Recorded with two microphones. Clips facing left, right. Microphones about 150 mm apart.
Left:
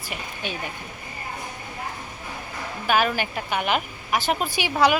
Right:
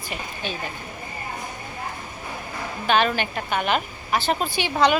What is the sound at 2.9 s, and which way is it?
A woman's voice, 5° left (ahead or behind).